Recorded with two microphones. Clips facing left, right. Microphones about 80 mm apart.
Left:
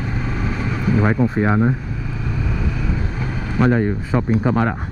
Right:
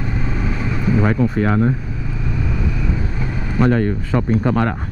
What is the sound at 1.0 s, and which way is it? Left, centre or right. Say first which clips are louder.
Speech: left 1 dB; centre.